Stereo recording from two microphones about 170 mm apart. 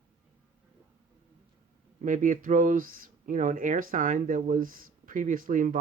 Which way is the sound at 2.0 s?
50° right (ahead or behind).